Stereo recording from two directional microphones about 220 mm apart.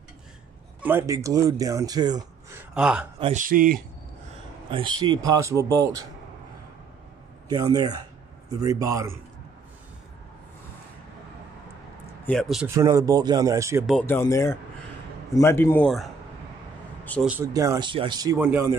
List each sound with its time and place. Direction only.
0.7 s speech: 10° right (ahead or behind)
2.7 s speech: 5° right (ahead or behind)
3.2 s speech: 30° right (ahead or behind)
4.6 s speech: 20° right (ahead or behind)
7.4 s speech: 15° right (ahead or behind)
12.3 s speech: centre (ahead or behind)
12.6 s speech: 15° right (ahead or behind)
13.8 s speech: 5° left (ahead or behind)
17.3 s speech: 10° right (ahead or behind)